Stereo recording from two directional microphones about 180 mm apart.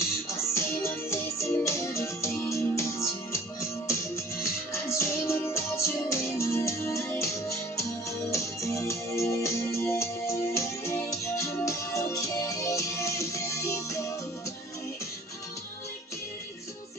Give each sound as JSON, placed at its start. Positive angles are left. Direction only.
{"t": 0.0, "sound": "music", "side_deg": 15}